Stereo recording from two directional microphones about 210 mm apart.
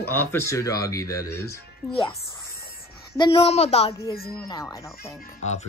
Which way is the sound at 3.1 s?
25° left (ahead or behind).